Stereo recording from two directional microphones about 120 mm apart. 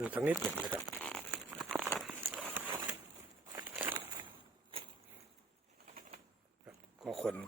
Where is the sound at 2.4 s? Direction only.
15° right (ahead or behind).